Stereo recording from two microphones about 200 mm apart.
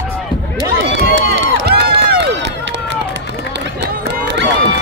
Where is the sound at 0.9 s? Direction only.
55° right (ahead or behind).